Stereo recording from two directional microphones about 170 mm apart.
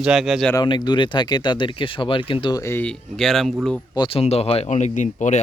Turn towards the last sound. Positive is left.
turn(degrees=45)  # may be behind; listen again after turning